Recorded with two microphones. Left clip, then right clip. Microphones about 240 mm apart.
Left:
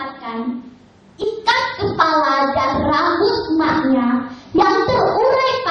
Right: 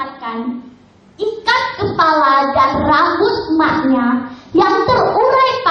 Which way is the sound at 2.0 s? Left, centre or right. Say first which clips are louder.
Right 4 dB; centre.